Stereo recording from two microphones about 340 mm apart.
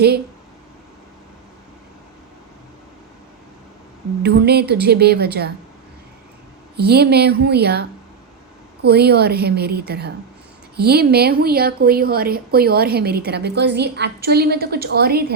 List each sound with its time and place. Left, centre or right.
4.2 s a woman's voice: right
6.7 s a woman's voice: right